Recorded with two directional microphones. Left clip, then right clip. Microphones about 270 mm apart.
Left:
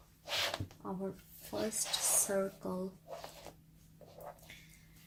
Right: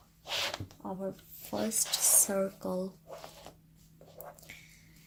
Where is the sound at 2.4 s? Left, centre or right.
Right.